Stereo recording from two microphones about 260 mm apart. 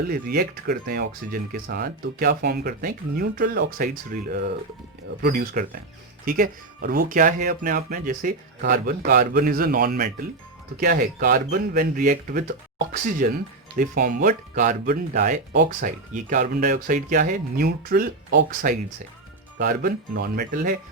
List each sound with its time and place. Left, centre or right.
0.0 s speech: right